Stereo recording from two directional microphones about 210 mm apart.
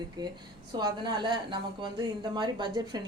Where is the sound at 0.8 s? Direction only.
20° right (ahead or behind).